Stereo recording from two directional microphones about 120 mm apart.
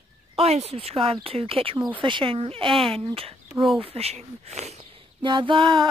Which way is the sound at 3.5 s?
Centre (ahead or behind).